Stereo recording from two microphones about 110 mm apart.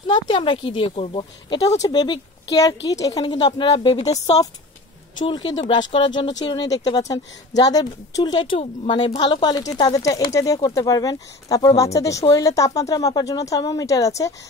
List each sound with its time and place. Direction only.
0.0 s a woman's voice: 45° left (ahead or behind)
1.9 s speech: 40° left (ahead or behind)
3.7 s speech: 55° left (ahead or behind)
5.6 s a woman's voice: 50° left (ahead or behind); by 14.3 s 30° left (ahead or behind)